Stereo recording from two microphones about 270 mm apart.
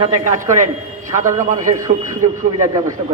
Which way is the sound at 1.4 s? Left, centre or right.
Right.